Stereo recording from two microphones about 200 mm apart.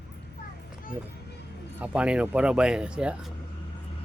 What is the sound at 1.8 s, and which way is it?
Speech, 5° right (ahead or behind).